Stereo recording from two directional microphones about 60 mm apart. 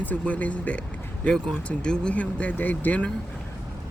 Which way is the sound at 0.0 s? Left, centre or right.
Left.